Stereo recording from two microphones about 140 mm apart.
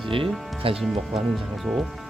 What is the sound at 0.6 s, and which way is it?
Speech, 40° right (ahead or behind).